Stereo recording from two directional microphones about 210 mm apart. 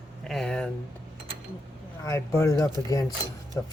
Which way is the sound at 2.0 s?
15° left (ahead or behind).